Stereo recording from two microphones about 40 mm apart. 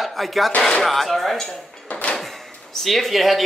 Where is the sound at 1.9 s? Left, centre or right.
Left.